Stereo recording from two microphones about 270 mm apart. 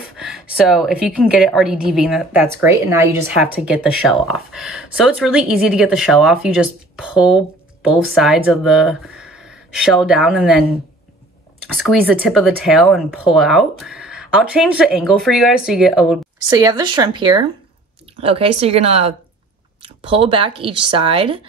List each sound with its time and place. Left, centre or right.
0.1 s a sound: centre
0.7 s speech: centre
11.7 s speech: centre
16.4 s speech: centre